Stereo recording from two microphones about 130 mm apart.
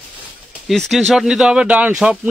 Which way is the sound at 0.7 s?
Centre (ahead or behind).